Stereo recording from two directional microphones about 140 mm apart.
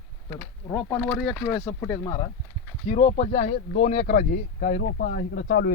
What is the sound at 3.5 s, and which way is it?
Speech, 90° left.